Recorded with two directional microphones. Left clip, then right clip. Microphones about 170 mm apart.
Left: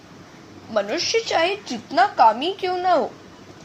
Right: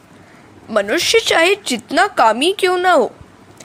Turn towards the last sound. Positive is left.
turn(degrees=-40)  # may be behind; listen again after turning